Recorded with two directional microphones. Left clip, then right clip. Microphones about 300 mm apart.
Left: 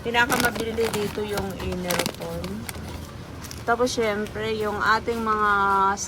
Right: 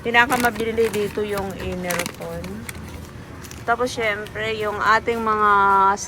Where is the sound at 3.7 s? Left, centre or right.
Centre.